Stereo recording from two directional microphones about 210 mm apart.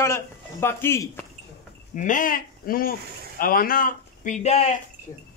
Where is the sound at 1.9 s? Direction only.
40° left (ahead or behind).